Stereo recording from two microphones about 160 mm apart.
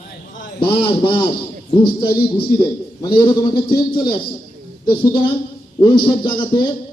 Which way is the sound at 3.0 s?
30° left (ahead or behind).